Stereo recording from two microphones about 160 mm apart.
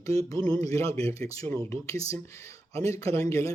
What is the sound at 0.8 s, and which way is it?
Speech, 40° right (ahead or behind).